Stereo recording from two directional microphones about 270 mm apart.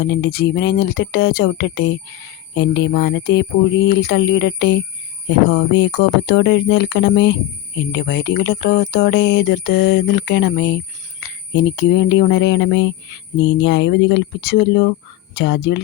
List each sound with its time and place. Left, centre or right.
0.0 s speech: left